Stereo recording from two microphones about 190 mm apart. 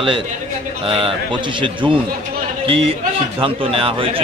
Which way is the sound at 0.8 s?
30° right (ahead or behind).